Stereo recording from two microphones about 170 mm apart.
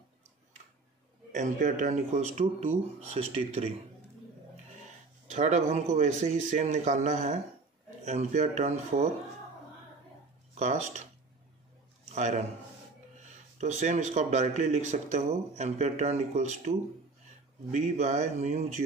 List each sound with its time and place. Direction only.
1.3 s speech: 50° right (ahead or behind)
4.8 s speech: 45° right (ahead or behind)
10.5 s speech: 45° right (ahead or behind)
12.2 s speech: 45° right (ahead or behind)
13.6 s speech: 45° right (ahead or behind)